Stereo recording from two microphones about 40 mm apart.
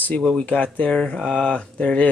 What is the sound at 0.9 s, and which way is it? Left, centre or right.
Speech, left.